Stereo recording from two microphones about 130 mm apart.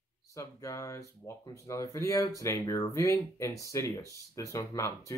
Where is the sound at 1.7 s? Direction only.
25° left (ahead or behind).